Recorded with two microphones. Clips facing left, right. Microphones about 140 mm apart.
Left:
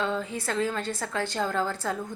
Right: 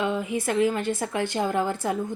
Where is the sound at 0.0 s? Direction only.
15° right (ahead or behind).